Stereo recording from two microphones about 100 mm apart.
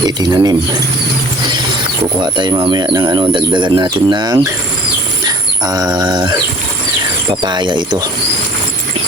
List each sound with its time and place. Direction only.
0.2 s speech: 45° right (ahead or behind)
2.2 s speech: 50° right (ahead or behind)
5.2 s a sound: 40° right (ahead or behind)
7.4 s speech: 50° right (ahead or behind)